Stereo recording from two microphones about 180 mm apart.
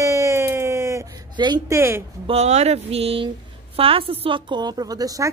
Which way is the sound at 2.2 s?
35° right (ahead or behind).